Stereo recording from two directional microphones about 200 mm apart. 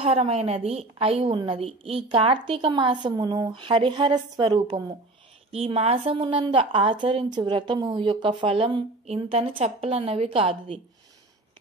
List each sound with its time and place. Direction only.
0.0 s a woman's voice: 30° right (ahead or behind)